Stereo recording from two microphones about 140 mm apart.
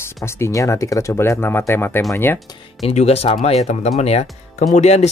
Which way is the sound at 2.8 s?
50° left (ahead or behind).